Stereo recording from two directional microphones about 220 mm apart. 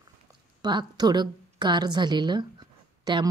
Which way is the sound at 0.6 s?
20° right (ahead or behind).